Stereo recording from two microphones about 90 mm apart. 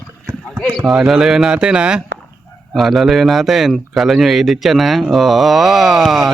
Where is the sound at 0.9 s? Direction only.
5° right (ahead or behind).